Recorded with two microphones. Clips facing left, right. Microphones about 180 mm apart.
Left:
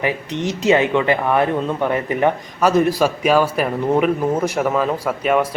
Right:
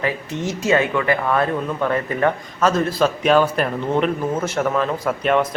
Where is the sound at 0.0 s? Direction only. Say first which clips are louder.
Left 2 dB; 20° left (ahead or behind).